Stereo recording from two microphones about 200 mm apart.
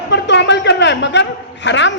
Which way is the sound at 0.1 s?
60° left (ahead or behind).